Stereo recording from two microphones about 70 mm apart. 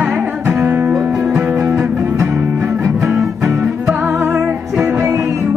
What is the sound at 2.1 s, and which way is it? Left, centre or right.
Music, right.